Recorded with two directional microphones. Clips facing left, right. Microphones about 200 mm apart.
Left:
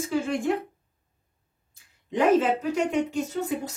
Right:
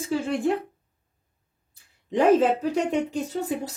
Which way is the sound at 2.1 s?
35° right (ahead or behind).